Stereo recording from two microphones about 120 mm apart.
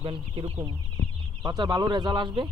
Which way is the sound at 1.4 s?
35° right (ahead or behind).